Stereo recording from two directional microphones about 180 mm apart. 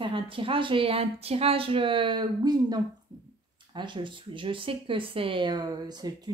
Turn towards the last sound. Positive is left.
turn(degrees=-25)  # may be behind; listen again after turning